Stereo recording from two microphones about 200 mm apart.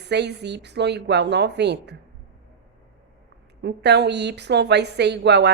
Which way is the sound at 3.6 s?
60° right (ahead or behind).